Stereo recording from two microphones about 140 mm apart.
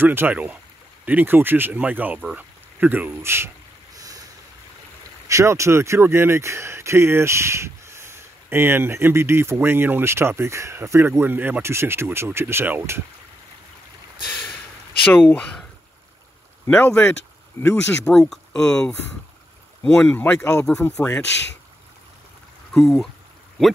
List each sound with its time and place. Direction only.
0.0 s speech: 15° right (ahead or behind)
5.3 s speech: 20° right (ahead or behind)
15.1 s speech: 10° left (ahead or behind)
16.6 s speech: 15° left (ahead or behind)
18.1 s speech: 5° left (ahead or behind)
22.8 s speech: centre (ahead or behind)